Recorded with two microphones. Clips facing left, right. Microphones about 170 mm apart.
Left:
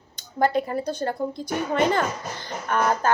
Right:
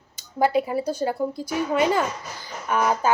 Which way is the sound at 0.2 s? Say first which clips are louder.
Right 1 dB; 5° right (ahead or behind).